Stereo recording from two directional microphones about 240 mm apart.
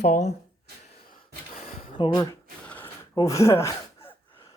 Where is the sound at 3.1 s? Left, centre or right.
Centre.